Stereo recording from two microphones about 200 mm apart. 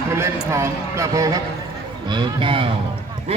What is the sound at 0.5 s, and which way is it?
Speech, 15° right (ahead or behind).